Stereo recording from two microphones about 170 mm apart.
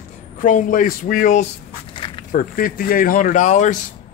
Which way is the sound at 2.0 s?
30° left (ahead or behind).